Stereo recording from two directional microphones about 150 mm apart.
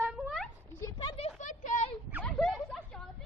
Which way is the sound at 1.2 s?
55° left (ahead or behind).